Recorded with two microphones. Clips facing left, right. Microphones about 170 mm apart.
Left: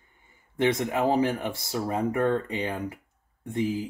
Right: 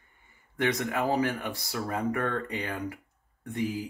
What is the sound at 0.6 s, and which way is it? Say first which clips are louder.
Speech: left 4 dB; 25° left (ahead or behind).